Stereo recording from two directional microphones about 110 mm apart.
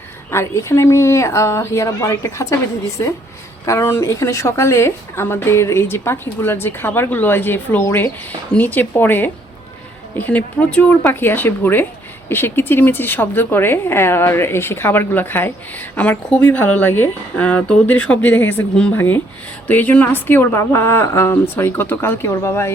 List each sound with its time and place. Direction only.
0.3 s a woman's voice: 25° left (ahead or behind)
3.7 s a woman's voice: 25° left (ahead or behind)